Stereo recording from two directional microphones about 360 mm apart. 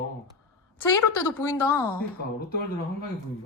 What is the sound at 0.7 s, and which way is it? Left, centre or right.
Speech, centre.